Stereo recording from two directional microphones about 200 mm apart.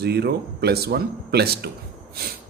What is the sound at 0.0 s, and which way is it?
A man's voice, 55° right (ahead or behind).